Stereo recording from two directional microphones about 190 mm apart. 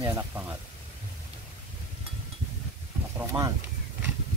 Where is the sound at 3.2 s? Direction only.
15° right (ahead or behind).